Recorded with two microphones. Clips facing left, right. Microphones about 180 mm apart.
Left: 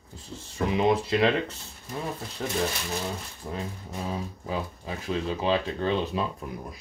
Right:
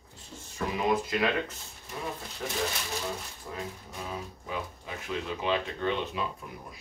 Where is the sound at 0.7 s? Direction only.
25° left (ahead or behind).